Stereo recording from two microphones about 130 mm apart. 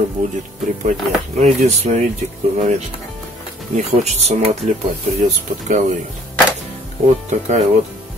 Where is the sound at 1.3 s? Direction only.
60° right (ahead or behind).